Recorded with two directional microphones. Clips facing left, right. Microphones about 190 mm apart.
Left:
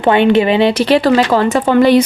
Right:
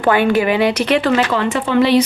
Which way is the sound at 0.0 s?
25° left (ahead or behind).